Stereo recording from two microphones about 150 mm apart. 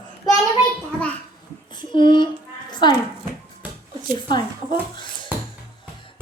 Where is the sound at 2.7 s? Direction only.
30° left (ahead or behind).